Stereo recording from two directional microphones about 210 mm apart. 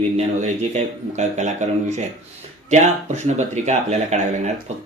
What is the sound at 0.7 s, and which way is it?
Speech, 35° right (ahead or behind).